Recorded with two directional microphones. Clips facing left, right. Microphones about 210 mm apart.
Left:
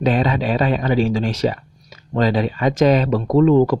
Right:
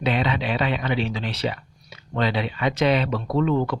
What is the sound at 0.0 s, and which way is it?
Speech, 45° left (ahead or behind).